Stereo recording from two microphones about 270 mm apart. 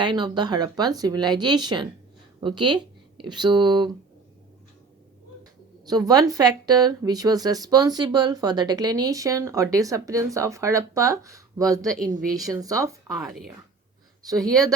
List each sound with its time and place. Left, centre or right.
0.0 s a woman's voice: centre
5.8 s a woman's voice: centre
13.2 s speech: centre
14.2 s speech: centre